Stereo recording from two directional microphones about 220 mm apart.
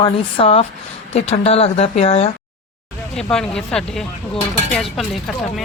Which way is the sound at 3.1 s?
5° left (ahead or behind).